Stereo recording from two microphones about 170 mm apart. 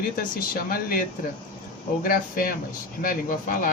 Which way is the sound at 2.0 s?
55° left (ahead or behind).